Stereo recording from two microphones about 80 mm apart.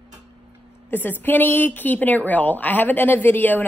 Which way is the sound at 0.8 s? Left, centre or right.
Left.